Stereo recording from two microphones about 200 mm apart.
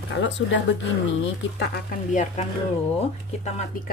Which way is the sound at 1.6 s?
50° left (ahead or behind).